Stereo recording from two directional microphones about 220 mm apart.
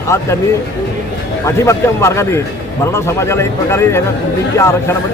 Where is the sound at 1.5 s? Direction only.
15° left (ahead or behind).